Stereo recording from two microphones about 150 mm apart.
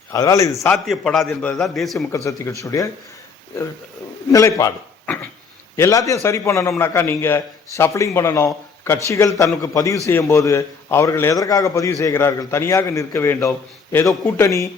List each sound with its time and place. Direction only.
0.1 s a man's voice: 20° left (ahead or behind)
0.9 s a man's voice: centre (ahead or behind)
2.1 s a man's voice: 20° left (ahead or behind)
4.3 s a man's voice: 20° left (ahead or behind)
5.7 s a man's voice: 20° left (ahead or behind)